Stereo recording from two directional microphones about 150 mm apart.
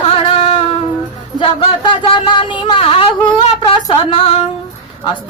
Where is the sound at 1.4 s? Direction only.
35° left (ahead or behind).